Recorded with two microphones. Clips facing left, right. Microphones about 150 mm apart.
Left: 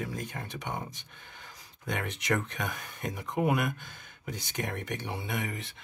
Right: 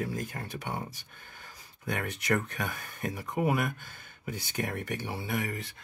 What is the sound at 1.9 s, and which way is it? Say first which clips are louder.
Speech: right 1 dB; 5° right (ahead or behind).